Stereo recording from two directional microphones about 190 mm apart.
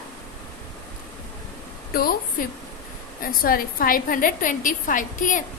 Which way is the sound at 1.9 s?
50° left (ahead or behind).